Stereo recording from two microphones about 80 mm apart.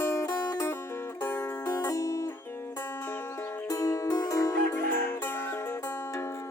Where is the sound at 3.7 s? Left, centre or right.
Left.